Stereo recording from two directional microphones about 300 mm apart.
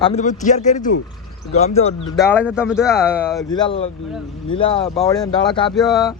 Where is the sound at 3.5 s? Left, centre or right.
Centre.